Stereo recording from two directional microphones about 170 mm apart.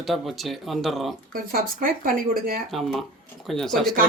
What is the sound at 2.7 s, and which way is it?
Speech, centre (ahead or behind).